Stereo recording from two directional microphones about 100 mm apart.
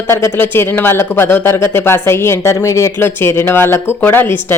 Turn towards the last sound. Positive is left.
turn(degrees=20)  # may be behind; listen again after turning